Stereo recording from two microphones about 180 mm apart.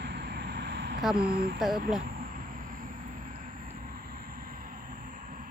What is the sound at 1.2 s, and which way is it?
Speech, 55° right (ahead or behind).